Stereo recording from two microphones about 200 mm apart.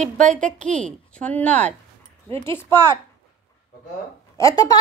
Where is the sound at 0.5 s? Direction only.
5° left (ahead or behind).